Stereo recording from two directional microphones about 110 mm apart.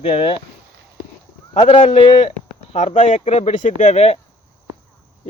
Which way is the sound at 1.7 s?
75° left (ahead or behind).